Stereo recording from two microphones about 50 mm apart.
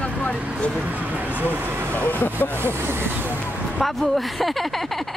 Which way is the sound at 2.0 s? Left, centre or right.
Left.